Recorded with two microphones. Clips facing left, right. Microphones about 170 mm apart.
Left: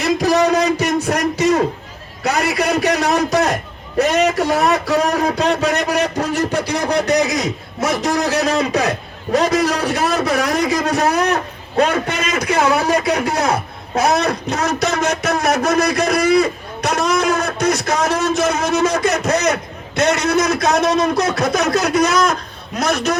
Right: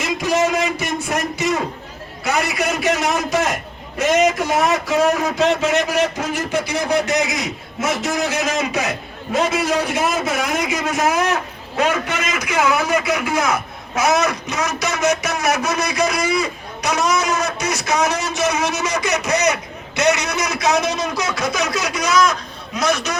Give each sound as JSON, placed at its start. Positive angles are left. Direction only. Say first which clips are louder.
{"t": 0.0, "sound": "a sound", "louder": "left 4 dB", "side_deg": 40}
{"t": 2.2, "sound": "a man's voice", "louder": "left 3 dB", "side_deg": 35}
{"t": 14.8, "sound": "a man's voice", "louder": "left 1 dB", "side_deg": 60}